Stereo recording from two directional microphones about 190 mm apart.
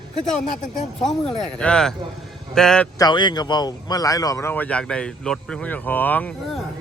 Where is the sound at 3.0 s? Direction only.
25° left (ahead or behind).